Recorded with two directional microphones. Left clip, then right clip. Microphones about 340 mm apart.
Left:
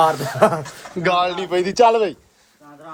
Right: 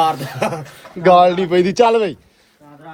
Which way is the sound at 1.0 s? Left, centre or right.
Centre.